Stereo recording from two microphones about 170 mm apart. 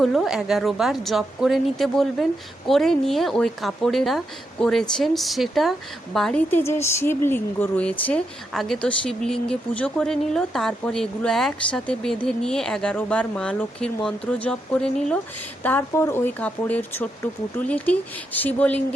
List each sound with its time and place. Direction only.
0.0 s a woman's voice: centre (ahead or behind)